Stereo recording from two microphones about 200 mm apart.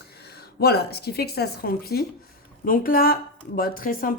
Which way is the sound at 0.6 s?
55° left (ahead or behind).